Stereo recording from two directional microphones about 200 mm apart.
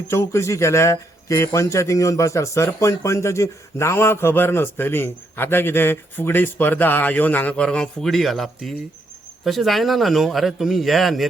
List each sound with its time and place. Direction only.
0.1 s a man's voice: 15° left (ahead or behind)